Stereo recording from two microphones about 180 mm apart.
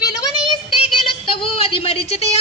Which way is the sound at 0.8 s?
30° left (ahead or behind).